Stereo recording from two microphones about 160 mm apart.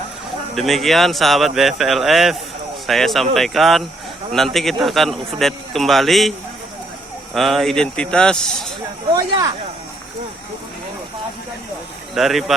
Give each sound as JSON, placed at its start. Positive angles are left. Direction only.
{"t": 0.5, "sound": "a man's voice", "side_deg": 0}
{"t": 7.3, "sound": "a man's voice", "side_deg": 0}
{"t": 9.1, "sound": "speech", "side_deg": -25}
{"t": 12.1, "sound": "a man's voice", "side_deg": 0}